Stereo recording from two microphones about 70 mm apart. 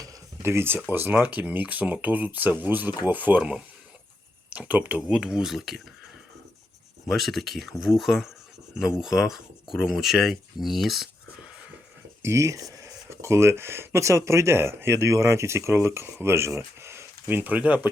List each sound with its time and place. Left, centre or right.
0.4 s speech: right; by 5.8 s centre
7.1 s speech: centre
12.2 s speech: right
13.1 s speech: right; by 17.9 s centre